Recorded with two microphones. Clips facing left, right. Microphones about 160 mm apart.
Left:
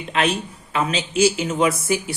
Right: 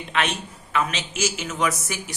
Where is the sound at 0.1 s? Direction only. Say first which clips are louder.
Left 4 dB; 35° left (ahead or behind).